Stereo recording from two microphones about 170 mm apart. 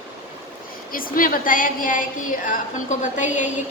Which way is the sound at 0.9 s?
55° left (ahead or behind).